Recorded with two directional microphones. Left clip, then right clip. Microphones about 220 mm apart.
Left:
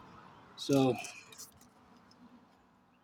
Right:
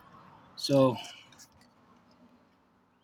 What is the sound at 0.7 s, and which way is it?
Speech, 45° right (ahead or behind).